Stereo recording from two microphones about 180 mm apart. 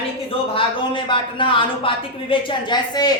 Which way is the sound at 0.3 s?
30° left (ahead or behind).